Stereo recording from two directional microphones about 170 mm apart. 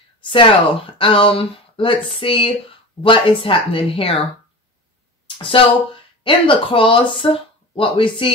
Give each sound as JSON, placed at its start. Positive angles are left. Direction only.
{"t": 0.2, "sound": "speech", "side_deg": 30}
{"t": 5.4, "sound": "speech", "side_deg": 30}